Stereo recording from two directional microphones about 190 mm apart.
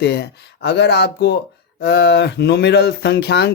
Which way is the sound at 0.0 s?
60° left (ahead or behind).